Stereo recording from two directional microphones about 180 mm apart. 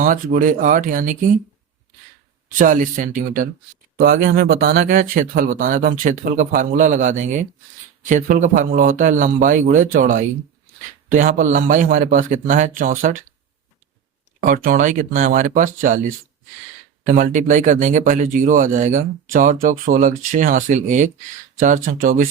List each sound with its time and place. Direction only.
0.0 s speech: 50° right (ahead or behind)
2.6 s speech: 45° right (ahead or behind)
14.4 s speech: 50° right (ahead or behind)
17.1 s speech: 45° right (ahead or behind)